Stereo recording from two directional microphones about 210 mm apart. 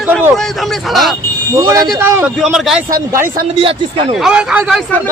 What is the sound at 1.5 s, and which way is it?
Speech, 15° right (ahead or behind).